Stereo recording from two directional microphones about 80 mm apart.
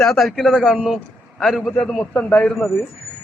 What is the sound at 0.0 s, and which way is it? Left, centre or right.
A man's voice, centre.